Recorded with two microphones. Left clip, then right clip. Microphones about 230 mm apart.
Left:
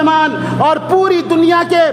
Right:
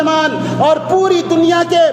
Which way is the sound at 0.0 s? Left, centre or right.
Left.